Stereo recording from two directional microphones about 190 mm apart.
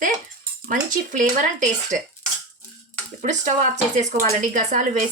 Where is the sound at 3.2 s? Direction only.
40° right (ahead or behind).